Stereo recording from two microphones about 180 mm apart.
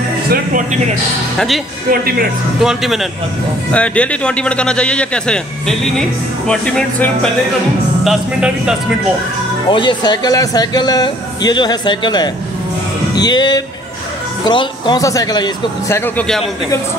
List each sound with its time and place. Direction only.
0.3 s speech: 45° right (ahead or behind)
1.9 s speech: 55° right (ahead or behind)
2.6 s a man's voice: centre (ahead or behind)
9.7 s a man's voice: 25° left (ahead or behind)
16.2 s a man's voice: 5° left (ahead or behind)